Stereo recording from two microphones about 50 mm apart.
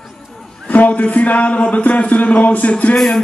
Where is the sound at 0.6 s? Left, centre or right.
Left.